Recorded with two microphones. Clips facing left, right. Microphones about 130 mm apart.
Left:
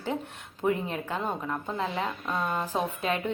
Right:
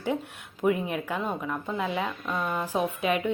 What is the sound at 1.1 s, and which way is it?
A woman's voice, 15° left (ahead or behind).